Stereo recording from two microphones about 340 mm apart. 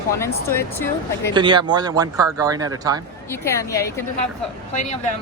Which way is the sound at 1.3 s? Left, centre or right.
Centre.